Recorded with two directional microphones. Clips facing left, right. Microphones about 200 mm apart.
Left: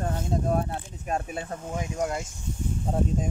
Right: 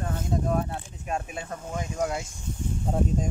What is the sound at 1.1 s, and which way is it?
Speech, 35° left (ahead or behind).